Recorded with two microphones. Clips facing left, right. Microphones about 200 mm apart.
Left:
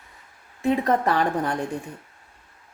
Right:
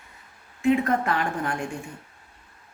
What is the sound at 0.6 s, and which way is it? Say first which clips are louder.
Speech: even; 35° left (ahead or behind).